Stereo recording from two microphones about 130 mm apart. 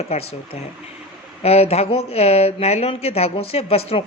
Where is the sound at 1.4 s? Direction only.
50° left (ahead or behind).